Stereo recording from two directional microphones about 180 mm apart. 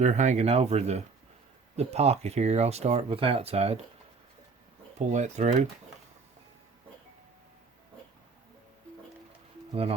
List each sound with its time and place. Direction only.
0.0 s speech: 40° right (ahead or behind)
4.9 s speech: 40° right (ahead or behind)